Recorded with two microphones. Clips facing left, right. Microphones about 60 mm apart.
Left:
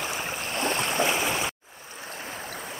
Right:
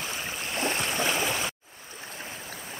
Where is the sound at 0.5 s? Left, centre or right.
Left.